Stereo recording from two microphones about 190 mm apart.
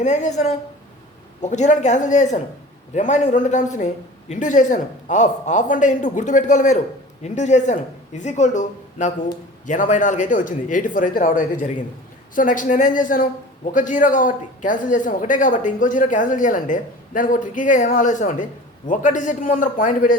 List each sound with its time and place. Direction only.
0.0 s a man's voice: 40° left (ahead or behind)